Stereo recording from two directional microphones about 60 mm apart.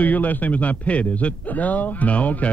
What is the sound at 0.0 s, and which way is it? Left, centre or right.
A man's voice, left.